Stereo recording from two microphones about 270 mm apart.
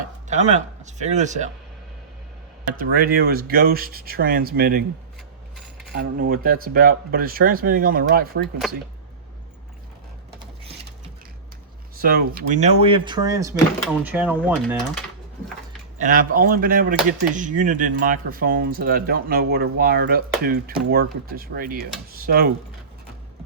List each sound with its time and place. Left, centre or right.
0.3 s speech: right
2.7 s speech: right
5.9 s speech: right
10.4 s a sound: centre
11.9 s speech: right; by 15.0 s centre
16.0 s speech: right